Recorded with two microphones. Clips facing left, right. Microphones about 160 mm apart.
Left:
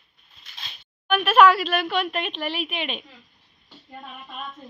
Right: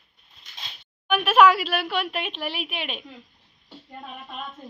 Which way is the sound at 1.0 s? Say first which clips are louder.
Left 1 dB; 10° right (ahead or behind).